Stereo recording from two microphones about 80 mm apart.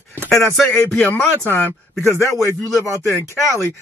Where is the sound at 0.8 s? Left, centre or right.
Left.